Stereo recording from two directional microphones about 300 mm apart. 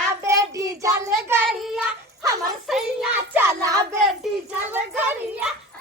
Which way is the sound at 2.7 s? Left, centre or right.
Centre.